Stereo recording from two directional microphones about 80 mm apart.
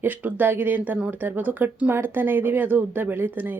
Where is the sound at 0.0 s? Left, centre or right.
Right.